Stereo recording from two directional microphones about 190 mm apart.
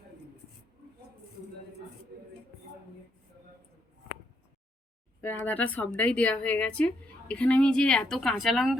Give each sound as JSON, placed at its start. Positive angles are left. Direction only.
{"t": 5.2, "sound": "speech", "side_deg": 10}